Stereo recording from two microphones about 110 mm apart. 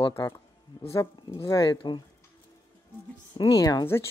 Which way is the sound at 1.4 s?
30° left (ahead or behind).